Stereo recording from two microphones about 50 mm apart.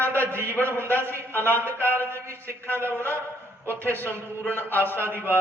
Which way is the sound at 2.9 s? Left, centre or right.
Left.